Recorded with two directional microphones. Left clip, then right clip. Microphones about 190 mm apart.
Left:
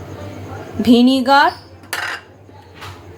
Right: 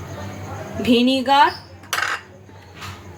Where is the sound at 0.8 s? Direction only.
30° left (ahead or behind).